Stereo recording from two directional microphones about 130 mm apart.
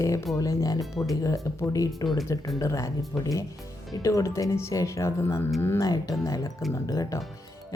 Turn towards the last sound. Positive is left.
turn(degrees=25)  # may be behind; listen again after turning